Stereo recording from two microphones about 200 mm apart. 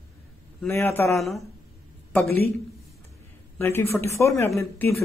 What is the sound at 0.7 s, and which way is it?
Speech, 10° left (ahead or behind).